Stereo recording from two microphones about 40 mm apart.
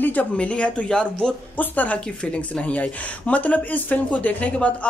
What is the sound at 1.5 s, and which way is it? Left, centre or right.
Speech, left.